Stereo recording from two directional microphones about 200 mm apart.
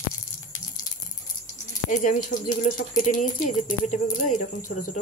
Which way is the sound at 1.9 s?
40° left (ahead or behind).